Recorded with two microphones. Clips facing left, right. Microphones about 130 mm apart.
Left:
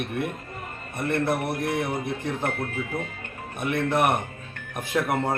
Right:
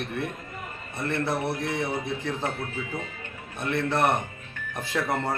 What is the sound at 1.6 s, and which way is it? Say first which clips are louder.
Music: left 2 dB; 55° left (ahead or behind).